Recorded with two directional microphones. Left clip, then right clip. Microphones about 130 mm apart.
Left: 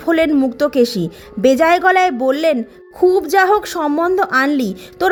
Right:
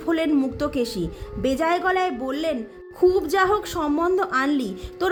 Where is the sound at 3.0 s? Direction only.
50° left (ahead or behind).